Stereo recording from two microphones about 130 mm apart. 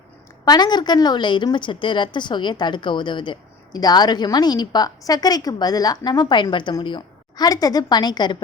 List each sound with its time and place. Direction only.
0.4 s a woman's voice: 30° left (ahead or behind)